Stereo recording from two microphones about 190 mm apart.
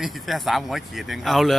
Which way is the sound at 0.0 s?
Centre (ahead or behind).